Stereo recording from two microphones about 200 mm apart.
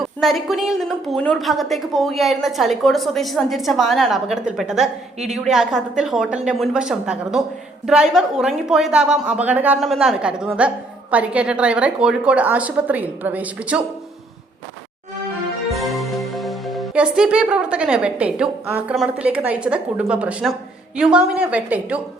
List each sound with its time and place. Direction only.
0.0 s a woman's voice: centre (ahead or behind)
15.7 s speech: centre (ahead or behind)